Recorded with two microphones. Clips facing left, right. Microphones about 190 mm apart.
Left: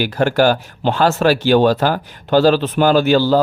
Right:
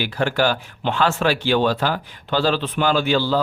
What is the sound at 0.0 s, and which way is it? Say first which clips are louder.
Speech: left 6 dB; 45° left (ahead or behind).